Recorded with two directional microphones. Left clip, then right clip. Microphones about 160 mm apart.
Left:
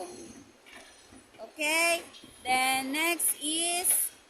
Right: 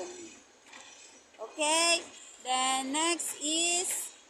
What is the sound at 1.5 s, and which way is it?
Speech, 10° left (ahead or behind).